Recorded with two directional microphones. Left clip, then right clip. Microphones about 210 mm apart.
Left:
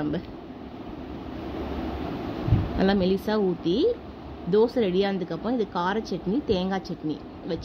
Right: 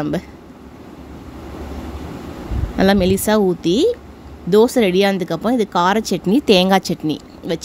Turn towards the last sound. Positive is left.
turn(degrees=-50)  # may be behind; listen again after turning